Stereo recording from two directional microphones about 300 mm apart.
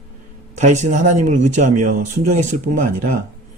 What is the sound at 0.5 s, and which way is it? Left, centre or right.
Speech, right.